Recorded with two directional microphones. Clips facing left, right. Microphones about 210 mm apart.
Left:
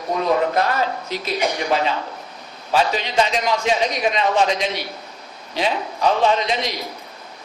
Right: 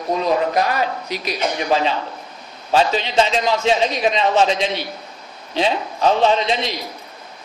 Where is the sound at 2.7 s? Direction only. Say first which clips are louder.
Right 2 dB; 25° right (ahead or behind).